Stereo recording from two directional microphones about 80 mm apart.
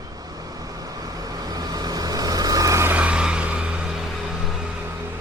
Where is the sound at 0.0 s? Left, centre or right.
Right.